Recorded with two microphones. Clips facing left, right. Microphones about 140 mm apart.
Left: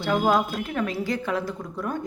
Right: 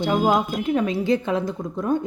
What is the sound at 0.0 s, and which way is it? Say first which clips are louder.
A woman's voice: right 2 dB; 20° right (ahead or behind).